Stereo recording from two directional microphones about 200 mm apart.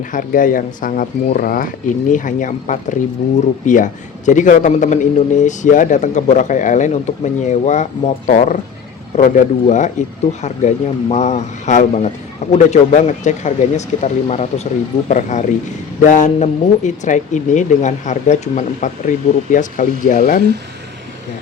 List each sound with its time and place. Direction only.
0.1 s speech: 40° left (ahead or behind)